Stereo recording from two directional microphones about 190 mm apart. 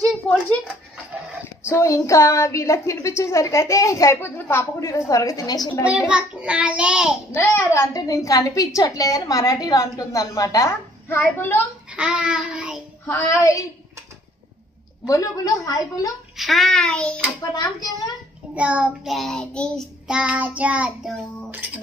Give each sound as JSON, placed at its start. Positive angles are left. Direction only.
{"t": 0.3, "sound": "a sound", "side_deg": 5}
{"t": 1.7, "sound": "a woman's voice", "side_deg": 15}
{"t": 5.9, "sound": "child singing", "side_deg": -5}
{"t": 7.3, "sound": "a woman's voice", "side_deg": 10}
{"t": 11.9, "sound": "child singing", "side_deg": -5}
{"t": 13.0, "sound": "a woman's voice", "side_deg": 15}
{"t": 15.0, "sound": "a woman's voice", "side_deg": 15}
{"t": 16.3, "sound": "child singing", "side_deg": 0}
{"t": 17.4, "sound": "a child's voice", "side_deg": 20}
{"t": 18.5, "sound": "child singing", "side_deg": -5}